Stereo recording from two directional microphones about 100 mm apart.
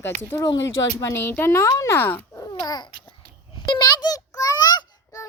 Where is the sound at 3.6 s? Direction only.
45° left (ahead or behind).